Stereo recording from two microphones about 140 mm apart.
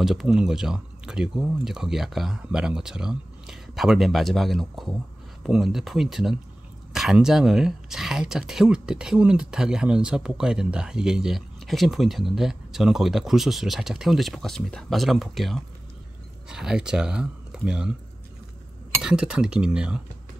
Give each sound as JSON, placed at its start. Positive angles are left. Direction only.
{"t": 0.0, "sound": "speech", "side_deg": 0}
{"t": 19.0, "sound": "speech", "side_deg": -5}